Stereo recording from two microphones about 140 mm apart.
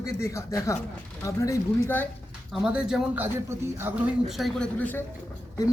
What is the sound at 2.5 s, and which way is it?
Speech, 5° right (ahead or behind).